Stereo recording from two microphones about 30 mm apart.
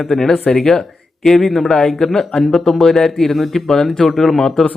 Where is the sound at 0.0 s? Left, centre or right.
Centre.